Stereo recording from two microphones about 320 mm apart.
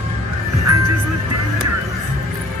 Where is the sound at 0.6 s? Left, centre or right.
Right.